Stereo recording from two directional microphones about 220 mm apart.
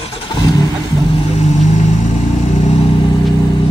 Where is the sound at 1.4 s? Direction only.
35° left (ahead or behind).